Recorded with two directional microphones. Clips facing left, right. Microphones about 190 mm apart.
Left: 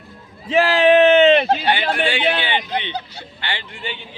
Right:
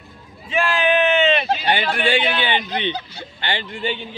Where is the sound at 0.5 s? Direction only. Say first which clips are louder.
Left 6 dB; 70° left (ahead or behind).